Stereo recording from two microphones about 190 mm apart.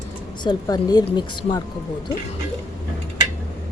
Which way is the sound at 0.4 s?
20° left (ahead or behind).